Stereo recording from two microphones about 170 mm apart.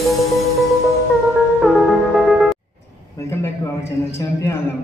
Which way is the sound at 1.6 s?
Centre (ahead or behind).